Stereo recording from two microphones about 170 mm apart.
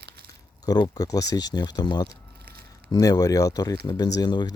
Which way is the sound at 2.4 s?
65° right (ahead or behind).